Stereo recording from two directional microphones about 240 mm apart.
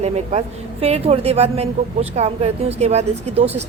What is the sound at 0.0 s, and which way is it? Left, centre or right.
A woman's voice, right.